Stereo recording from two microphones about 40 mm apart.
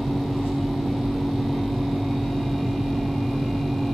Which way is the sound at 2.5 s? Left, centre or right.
Centre.